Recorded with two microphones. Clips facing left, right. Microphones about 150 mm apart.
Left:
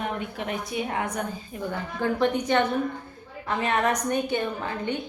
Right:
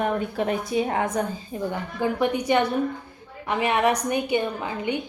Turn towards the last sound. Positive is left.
turn(degrees=-10)  # may be behind; listen again after turning